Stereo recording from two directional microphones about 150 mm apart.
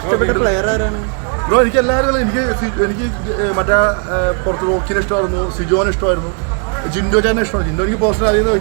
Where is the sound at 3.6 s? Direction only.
15° left (ahead or behind).